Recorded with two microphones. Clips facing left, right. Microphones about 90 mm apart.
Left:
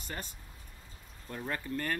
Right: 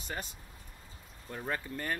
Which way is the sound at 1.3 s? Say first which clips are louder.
Left 1 dB; 15° right (ahead or behind).